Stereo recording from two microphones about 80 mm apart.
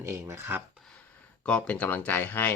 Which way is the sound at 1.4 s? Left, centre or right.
Centre.